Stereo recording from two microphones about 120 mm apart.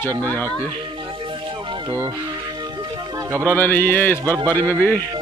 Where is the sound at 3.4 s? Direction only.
15° left (ahead or behind).